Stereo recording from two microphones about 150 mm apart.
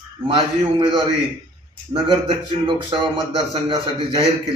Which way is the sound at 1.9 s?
35° right (ahead or behind).